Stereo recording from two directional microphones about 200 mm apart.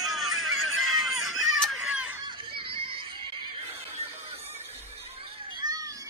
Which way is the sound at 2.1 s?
25° right (ahead or behind).